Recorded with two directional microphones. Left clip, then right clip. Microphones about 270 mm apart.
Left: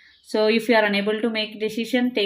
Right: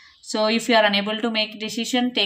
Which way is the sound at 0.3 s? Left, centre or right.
Centre.